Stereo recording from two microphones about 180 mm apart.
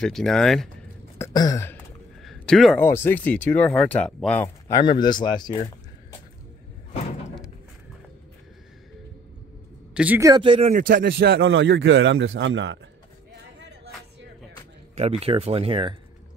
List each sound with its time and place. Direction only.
0.0 s speech: 5° left (ahead or behind)
1.1 s throat clearing: 20° left (ahead or behind)
2.2 s a sound: centre (ahead or behind)
2.8 s speech: 10° left (ahead or behind)
9.9 s a man's voice: 10° right (ahead or behind)
10.3 s speech: 30° right (ahead or behind)
11.0 s a man's voice: 70° right (ahead or behind)
13.6 s a sound: 65° right (ahead or behind)
15.0 s speech: 35° right (ahead or behind)